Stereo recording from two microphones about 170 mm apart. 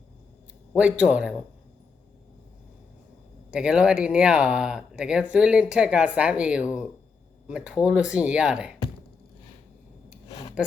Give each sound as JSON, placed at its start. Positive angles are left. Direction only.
{"t": 0.7, "sound": "speech", "side_deg": -5}
{"t": 3.5, "sound": "speech", "side_deg": -5}
{"t": 10.2, "sound": "a sound", "side_deg": 20}